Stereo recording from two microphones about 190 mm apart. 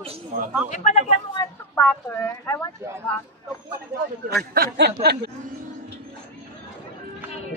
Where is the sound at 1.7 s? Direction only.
10° left (ahead or behind).